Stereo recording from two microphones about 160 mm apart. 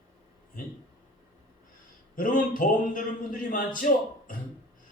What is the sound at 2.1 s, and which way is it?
Speech, 60° left (ahead or behind).